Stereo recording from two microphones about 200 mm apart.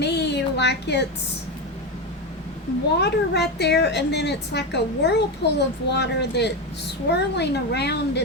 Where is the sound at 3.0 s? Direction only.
55° left (ahead or behind).